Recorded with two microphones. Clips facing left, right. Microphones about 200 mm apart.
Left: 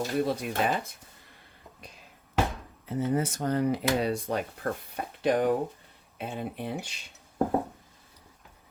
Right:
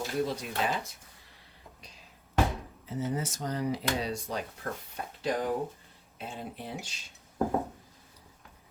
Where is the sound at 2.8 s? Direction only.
55° left (ahead or behind).